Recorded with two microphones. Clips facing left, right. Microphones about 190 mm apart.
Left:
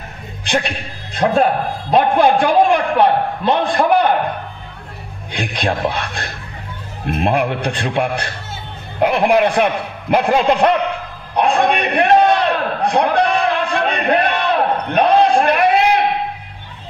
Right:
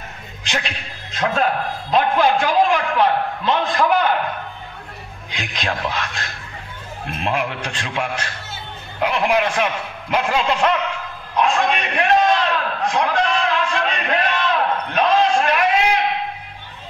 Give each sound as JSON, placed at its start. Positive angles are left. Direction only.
{"t": 0.5, "sound": "a man's voice", "side_deg": 55}
{"t": 5.3, "sound": "a man's voice", "side_deg": 55}
{"t": 12.9, "sound": "a sound", "side_deg": 55}